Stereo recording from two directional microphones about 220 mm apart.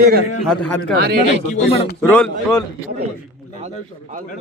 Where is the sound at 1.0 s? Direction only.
45° right (ahead or behind).